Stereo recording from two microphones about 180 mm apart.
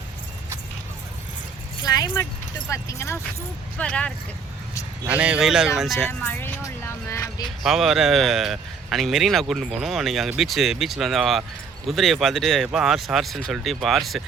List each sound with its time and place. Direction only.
1.8 s speech: 20° left (ahead or behind)
5.0 s speech: 5° right (ahead or behind)
6.1 s speech: 10° left (ahead or behind)
6.8 s vehicle: 15° left (ahead or behind)
7.6 s speech: centre (ahead or behind)